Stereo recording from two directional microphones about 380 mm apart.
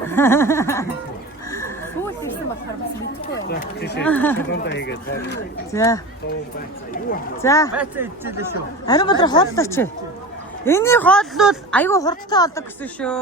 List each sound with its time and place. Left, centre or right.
0.1 s a sound: centre
1.5 s neigh: centre
3.5 s speech: left
4.0 s a woman's voice: centre
4.4 s speech: left
5.7 s a woman's voice: centre
7.4 s a woman's voice: centre
7.8 s a woman's voice: centre
8.9 s a woman's voice: centre